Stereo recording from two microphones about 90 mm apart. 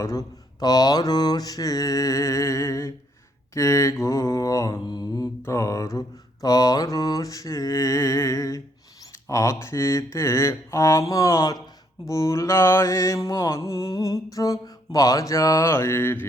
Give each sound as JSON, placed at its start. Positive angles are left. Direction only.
{"t": 0.0, "sound": "mantra", "side_deg": 35}
{"t": 0.6, "sound": "mantra", "side_deg": 45}